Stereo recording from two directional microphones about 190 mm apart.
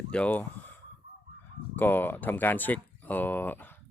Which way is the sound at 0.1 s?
10° left (ahead or behind).